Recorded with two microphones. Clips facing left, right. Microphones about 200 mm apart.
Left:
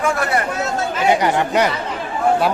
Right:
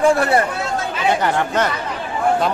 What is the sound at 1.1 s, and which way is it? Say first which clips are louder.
Speech: left 2 dB; 15° left (ahead or behind).